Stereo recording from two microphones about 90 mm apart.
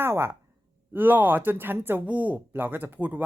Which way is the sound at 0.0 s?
25° right (ahead or behind).